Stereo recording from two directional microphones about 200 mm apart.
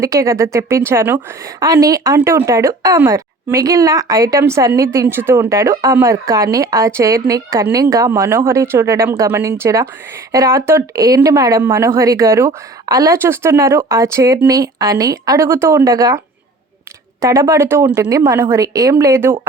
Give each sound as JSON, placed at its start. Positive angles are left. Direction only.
{"t": 0.0, "sound": "a woman's voice", "side_deg": -15}